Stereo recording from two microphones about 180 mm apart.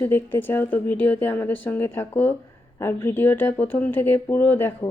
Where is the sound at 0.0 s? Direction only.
10° left (ahead or behind).